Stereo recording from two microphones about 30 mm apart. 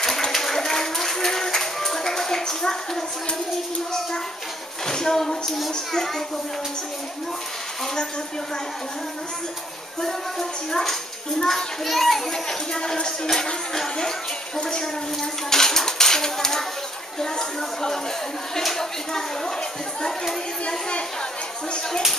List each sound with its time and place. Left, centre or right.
0.3 s music: centre
4.8 s a child's voice: centre
10.7 s a child's voice: centre
12.3 s speech: left
14.6 s a child's voice: left